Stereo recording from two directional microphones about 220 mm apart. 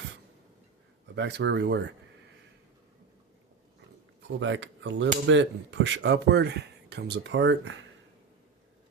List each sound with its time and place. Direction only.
1.1 s speech: 50° right (ahead or behind)
4.4 s speech: 55° right (ahead or behind)